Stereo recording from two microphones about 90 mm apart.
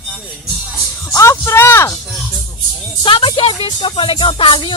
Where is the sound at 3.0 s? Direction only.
75° left (ahead or behind).